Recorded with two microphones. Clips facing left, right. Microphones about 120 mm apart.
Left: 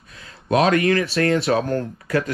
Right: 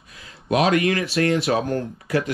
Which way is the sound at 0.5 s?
35° left (ahead or behind).